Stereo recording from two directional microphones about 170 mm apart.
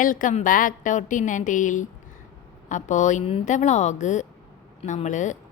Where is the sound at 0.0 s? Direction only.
50° left (ahead or behind).